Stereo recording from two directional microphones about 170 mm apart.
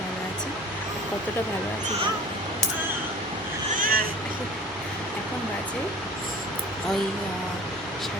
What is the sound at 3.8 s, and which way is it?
Vehicle, 60° right (ahead or behind).